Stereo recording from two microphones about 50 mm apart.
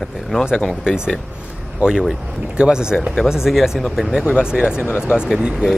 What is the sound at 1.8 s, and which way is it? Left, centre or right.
Speech, centre.